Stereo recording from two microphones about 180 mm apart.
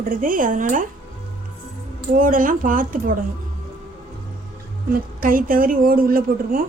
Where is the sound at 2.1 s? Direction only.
50° right (ahead or behind).